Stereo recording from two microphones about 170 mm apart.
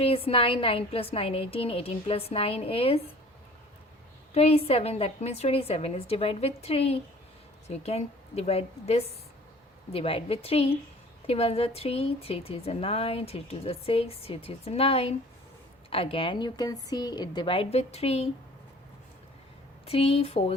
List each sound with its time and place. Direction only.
0.0 s speech: 35° left (ahead or behind)
4.4 s speech: 35° left (ahead or behind)
19.8 s speech: 35° left (ahead or behind)